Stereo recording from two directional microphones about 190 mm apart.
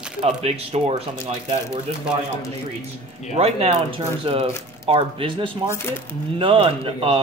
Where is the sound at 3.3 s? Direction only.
30° right (ahead or behind).